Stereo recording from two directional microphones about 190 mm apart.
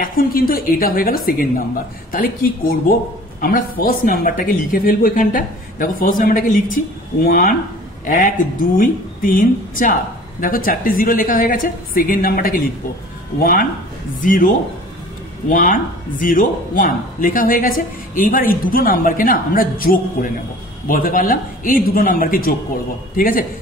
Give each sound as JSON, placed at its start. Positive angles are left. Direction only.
{"t": 0.0, "sound": "a man's voice", "side_deg": 50}
{"t": 15.5, "sound": "speech", "side_deg": 45}